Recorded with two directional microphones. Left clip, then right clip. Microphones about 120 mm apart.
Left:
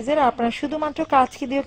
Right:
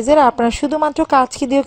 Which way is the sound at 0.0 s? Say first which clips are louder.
Right 7 dB; 35° right (ahead or behind).